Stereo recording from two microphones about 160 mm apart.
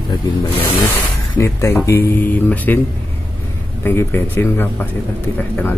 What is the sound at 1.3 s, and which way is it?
Speech, 15° left (ahead or behind).